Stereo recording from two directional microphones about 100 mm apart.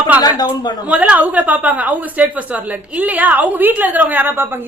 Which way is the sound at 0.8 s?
15° right (ahead or behind).